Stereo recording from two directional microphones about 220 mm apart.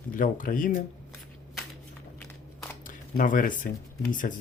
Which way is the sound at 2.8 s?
40° left (ahead or behind).